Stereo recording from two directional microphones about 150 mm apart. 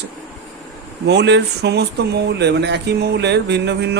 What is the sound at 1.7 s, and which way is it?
Speech, 90° right.